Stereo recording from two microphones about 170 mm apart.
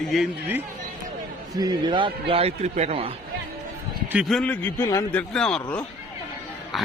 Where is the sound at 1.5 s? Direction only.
25° right (ahead or behind).